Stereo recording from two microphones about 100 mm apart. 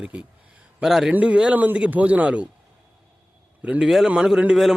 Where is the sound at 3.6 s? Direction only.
5° right (ahead or behind).